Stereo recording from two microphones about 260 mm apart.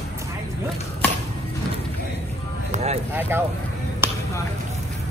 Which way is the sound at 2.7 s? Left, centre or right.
Right.